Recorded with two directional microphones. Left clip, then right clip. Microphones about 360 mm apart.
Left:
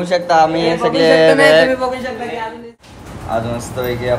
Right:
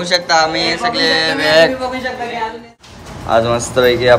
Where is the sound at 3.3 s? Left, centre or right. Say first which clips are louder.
Right 7 dB; right.